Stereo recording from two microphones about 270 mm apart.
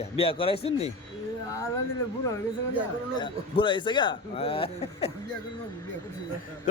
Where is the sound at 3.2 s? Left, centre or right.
Centre.